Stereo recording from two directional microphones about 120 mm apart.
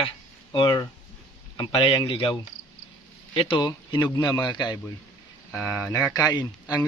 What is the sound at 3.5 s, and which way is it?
A man's voice, 40° left (ahead or behind).